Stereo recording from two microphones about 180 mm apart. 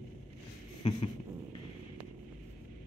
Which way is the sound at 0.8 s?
30° left (ahead or behind).